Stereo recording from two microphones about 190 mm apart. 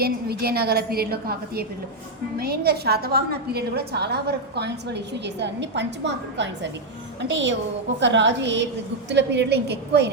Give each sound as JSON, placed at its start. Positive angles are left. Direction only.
{"t": 0.0, "sound": "a woman's voice", "side_deg": -55}